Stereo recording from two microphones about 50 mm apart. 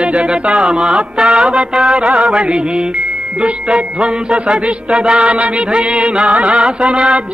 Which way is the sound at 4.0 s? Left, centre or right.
Centre.